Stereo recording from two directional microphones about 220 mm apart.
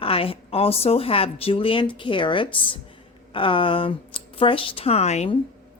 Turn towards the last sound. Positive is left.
turn(degrees=30)  # may be behind; listen again after turning